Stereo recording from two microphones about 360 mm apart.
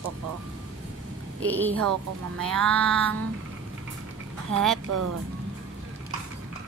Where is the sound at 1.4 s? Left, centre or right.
Centre.